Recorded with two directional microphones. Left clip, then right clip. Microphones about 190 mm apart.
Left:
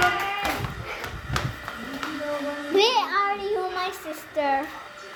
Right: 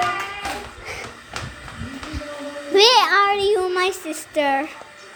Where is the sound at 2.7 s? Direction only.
45° right (ahead or behind).